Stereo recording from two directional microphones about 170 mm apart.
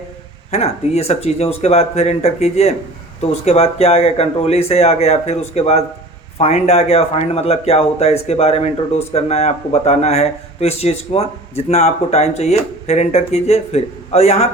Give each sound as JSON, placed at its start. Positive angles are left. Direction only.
{"t": 0.5, "sound": "speech", "side_deg": 40}